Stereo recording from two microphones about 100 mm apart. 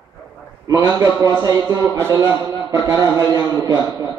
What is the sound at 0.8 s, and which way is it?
A man's voice, 40° right (ahead or behind).